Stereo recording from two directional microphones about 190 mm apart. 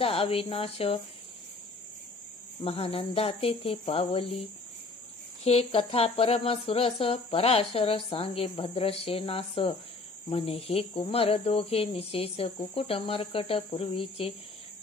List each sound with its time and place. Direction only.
0.0 s speech: 30° left (ahead or behind)
2.6 s speech: 30° left (ahead or behind)
5.4 s speech: 30° left (ahead or behind)